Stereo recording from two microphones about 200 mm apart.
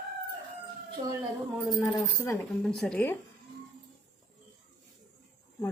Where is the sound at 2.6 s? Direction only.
5° left (ahead or behind).